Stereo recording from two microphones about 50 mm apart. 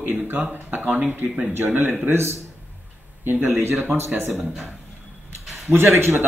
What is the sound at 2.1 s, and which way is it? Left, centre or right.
Speech, right.